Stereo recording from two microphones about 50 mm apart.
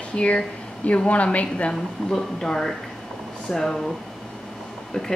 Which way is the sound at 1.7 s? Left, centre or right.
Centre.